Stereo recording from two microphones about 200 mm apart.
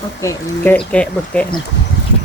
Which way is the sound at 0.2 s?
10° left (ahead or behind).